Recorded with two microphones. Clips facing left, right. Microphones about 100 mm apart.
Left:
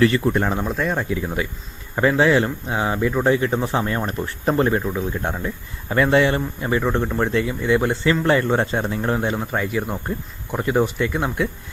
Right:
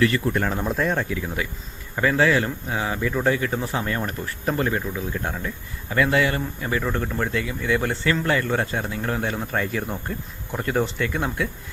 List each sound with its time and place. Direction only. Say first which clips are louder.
0.0 s speech: left 4 dB; 25° left (ahead or behind)
0.6 s speech: even; centre (ahead or behind)
0.9 s speech: left 3 dB; 25° left (ahead or behind)